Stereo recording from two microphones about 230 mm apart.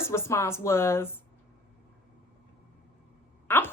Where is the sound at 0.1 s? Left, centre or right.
Centre.